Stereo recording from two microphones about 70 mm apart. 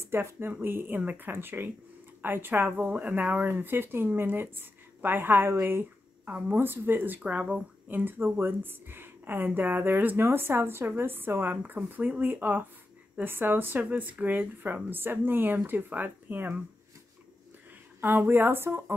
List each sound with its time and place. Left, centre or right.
0.0 s speech: right
7.2 s speech: centre
18.3 s speech: right